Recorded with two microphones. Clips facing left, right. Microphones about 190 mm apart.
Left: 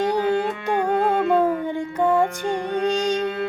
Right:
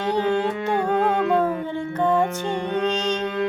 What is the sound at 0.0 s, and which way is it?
Music, 10° left (ahead or behind).